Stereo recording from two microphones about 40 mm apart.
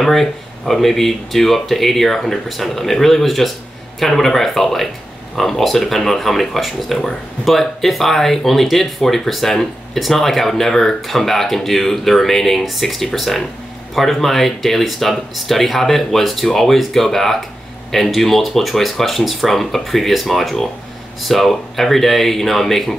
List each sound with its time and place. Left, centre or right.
0.0 s speech: centre